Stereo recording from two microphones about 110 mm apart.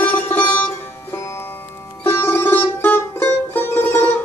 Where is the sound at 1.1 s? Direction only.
25° left (ahead or behind).